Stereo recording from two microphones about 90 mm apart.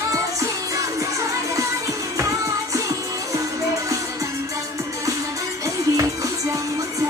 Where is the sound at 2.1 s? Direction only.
35° right (ahead or behind).